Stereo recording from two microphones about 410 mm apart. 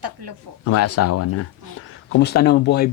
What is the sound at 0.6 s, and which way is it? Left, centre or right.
Speech, left.